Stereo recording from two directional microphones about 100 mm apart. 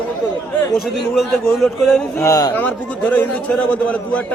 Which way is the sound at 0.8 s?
Centre (ahead or behind).